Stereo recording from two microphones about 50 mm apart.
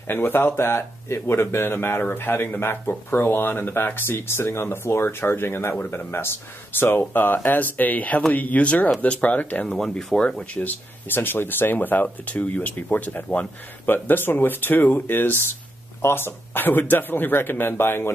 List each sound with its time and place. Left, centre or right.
0.0 s speech: left
9.7 s speech: centre
10.6 s speech: left
11.1 s speech: left
13.8 s speech: left